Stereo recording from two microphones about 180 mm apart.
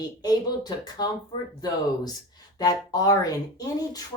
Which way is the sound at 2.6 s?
20° left (ahead or behind).